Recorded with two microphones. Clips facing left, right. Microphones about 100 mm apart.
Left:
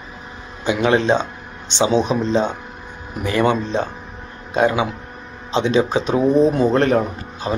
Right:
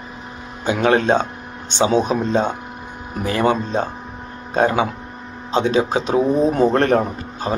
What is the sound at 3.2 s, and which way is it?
Speech, 35° right (ahead or behind).